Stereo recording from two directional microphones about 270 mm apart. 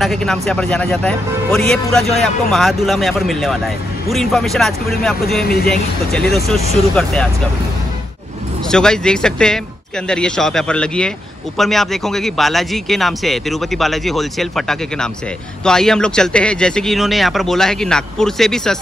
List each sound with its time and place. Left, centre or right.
0.0 s a man's voice: centre
5.4 s speech: left
5.7 s a man's voice: centre
8.6 s a man's voice: centre